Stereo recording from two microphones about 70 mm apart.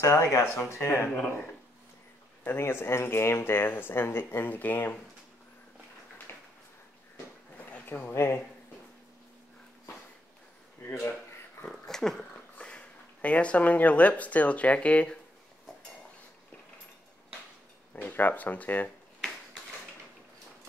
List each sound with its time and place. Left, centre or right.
0.0 s speech: left
2.4 s speech: left
7.5 s a sound: left
8.1 s speech: left
10.9 s speech: left
11.6 s speech: centre
18.0 s speech: left